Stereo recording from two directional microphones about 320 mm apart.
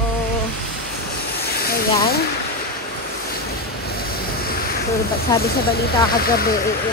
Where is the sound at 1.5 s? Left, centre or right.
Left.